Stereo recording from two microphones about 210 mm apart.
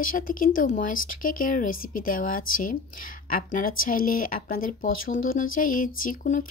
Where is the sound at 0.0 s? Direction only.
40° left (ahead or behind).